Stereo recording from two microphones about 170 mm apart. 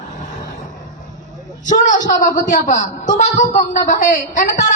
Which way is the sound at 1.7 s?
50° left (ahead or behind).